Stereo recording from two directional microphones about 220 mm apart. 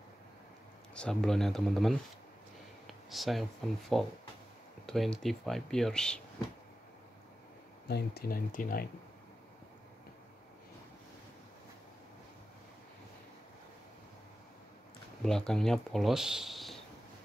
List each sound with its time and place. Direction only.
0.9 s speech: 5° left (ahead or behind)
2.9 s a sound: centre (ahead or behind)
3.9 s speech: centre (ahead or behind)
7.9 s speech: 45° left (ahead or behind)
15.2 s speech: 5° left (ahead or behind)